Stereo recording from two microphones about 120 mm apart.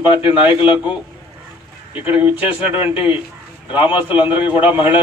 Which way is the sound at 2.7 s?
50° left (ahead or behind).